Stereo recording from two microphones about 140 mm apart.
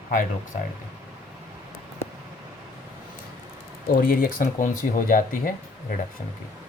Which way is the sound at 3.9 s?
90° left.